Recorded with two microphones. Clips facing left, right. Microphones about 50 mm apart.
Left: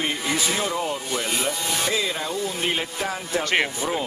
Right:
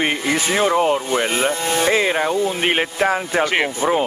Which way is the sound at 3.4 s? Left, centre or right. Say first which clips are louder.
Right 2 dB; centre.